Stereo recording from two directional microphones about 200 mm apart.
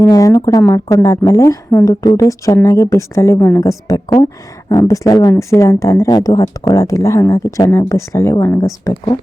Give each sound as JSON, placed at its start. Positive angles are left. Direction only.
{"t": 0.0, "sound": "a woman's voice", "side_deg": 15}